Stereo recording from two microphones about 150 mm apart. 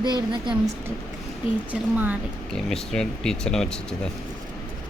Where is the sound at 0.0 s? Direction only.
30° right (ahead or behind).